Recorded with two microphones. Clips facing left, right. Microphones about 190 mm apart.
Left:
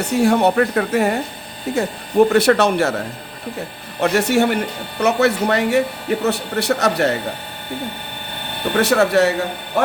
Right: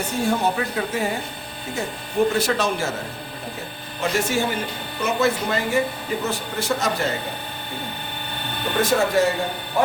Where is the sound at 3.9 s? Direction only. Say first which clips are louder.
Left 7 dB; 65° left (ahead or behind).